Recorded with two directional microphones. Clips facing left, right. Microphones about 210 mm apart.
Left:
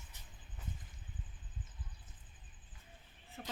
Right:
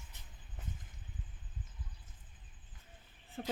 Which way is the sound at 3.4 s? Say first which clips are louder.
Right 8 dB; 40° right (ahead or behind).